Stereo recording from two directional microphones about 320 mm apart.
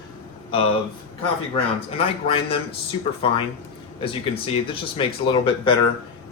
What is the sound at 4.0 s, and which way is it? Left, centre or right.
Speech, centre.